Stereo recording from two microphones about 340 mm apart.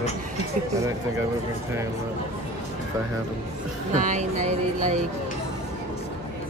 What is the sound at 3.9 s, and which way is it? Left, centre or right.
Music, right.